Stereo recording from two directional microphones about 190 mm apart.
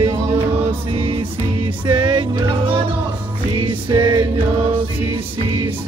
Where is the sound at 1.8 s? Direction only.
25° right (ahead or behind).